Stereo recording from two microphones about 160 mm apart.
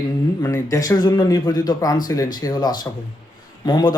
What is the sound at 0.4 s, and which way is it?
Speech, 15° left (ahead or behind).